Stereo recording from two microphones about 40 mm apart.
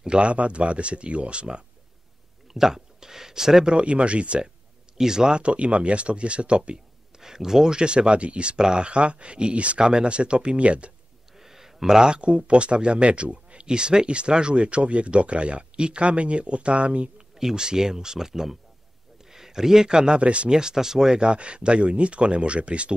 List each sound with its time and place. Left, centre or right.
0.0 s speech: right
2.5 s speech: centre
3.7 s speech: right
4.9 s speech: centre
5.4 s speech: right
7.2 s speech: centre; by 9.8 s right
9.8 s speech: centre
11.3 s speech: centre; by 17.1 s right
17.4 s a man's voice: centre
20.2 s speech: right
20.5 s speech: centre